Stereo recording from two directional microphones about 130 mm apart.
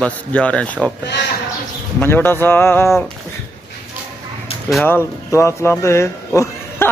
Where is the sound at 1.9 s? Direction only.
15° left (ahead or behind).